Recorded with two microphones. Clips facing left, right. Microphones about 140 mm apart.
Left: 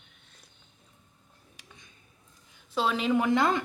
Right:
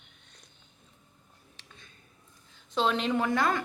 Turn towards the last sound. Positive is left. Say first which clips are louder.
# left 3 dB
turn(degrees=20)  # may be behind; listen again after turning